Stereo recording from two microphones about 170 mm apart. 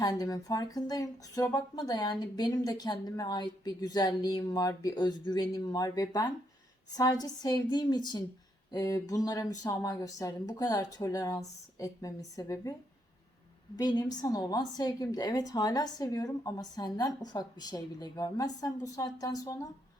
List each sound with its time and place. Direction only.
0.0 s speech: 20° left (ahead or behind)
13.7 s speech: 25° left (ahead or behind)